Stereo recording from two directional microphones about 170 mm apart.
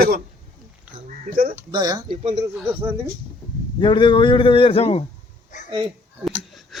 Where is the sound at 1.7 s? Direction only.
20° right (ahead or behind).